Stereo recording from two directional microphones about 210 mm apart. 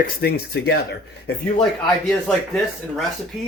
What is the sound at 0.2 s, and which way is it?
Speech, 50° left (ahead or behind).